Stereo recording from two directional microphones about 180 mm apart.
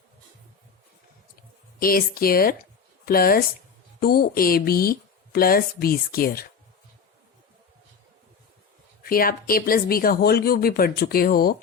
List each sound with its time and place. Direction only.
1.8 s speech: 55° left (ahead or behind)
9.0 s speech: 55° left (ahead or behind)